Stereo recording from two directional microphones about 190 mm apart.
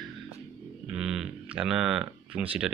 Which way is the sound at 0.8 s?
5° right (ahead or behind).